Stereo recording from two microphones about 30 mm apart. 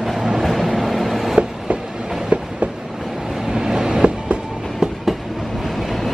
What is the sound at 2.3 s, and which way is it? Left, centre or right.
Train, right.